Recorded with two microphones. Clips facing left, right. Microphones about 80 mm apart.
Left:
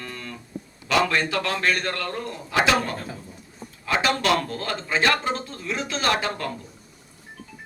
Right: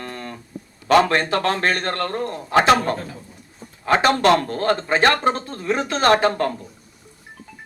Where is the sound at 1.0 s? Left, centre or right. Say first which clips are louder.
Right 4 dB; right.